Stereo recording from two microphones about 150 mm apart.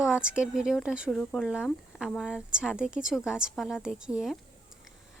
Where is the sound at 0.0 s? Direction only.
5° right (ahead or behind).